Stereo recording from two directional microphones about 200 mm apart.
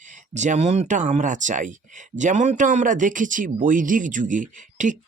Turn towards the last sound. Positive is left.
turn(degrees=-40)  # may be behind; listen again after turning